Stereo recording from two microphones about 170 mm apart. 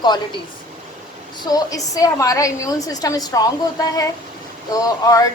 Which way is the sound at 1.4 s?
20° left (ahead or behind).